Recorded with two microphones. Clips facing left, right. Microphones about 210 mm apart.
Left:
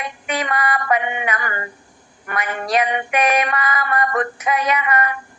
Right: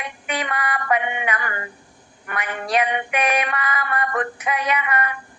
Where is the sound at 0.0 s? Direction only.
40° left (ahead or behind).